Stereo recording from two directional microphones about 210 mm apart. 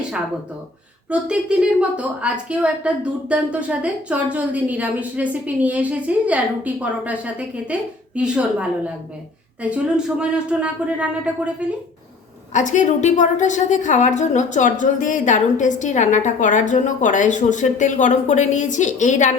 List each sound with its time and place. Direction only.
1.1 s a woman's voice: 5° right (ahead or behind)
12.5 s a woman's voice: 35° left (ahead or behind)